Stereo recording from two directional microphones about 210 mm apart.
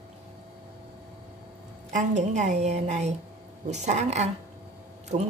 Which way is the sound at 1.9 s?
35° right (ahead or behind).